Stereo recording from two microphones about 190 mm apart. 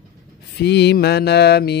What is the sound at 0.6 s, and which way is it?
Speech, 60° left (ahead or behind).